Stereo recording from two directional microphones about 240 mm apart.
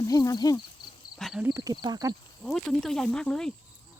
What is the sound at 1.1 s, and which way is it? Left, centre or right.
Speech, centre.